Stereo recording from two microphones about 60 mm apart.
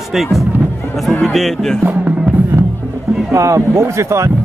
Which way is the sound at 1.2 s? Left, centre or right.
Centre.